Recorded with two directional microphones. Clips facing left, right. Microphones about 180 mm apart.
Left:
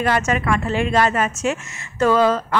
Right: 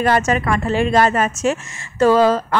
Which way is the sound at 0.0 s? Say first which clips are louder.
Right 3 dB; 40° right (ahead or behind).